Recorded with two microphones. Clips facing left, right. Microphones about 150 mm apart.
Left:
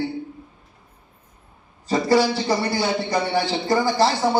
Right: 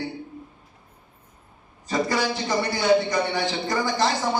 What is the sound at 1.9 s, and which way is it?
Speech, 30° left (ahead or behind).